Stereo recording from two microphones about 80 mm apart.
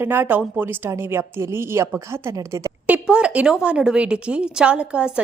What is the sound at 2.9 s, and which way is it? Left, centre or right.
A woman's voice, centre.